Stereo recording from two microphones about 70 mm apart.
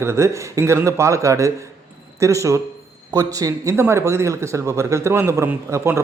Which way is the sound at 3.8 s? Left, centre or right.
Right.